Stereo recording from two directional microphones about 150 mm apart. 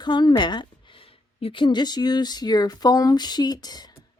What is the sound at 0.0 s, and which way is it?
A woman's voice, 30° left (ahead or behind).